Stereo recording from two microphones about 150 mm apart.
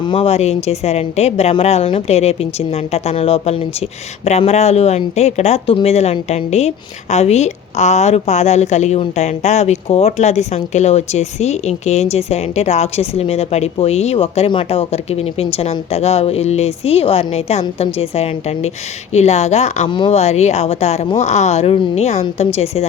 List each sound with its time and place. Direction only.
0.0 s speech: 35° left (ahead or behind)
19.9 s speech: 30° left (ahead or behind)
20.1 s speech: 45° left (ahead or behind)